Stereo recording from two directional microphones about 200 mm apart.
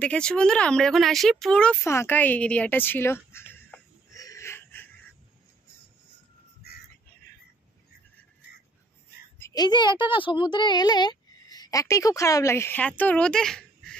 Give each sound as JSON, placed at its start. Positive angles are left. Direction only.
{"t": 0.0, "sound": "speech", "side_deg": 5}
{"t": 9.4, "sound": "speech", "side_deg": 20}